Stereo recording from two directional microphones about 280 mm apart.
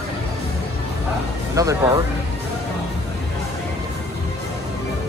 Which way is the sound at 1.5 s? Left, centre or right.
Centre.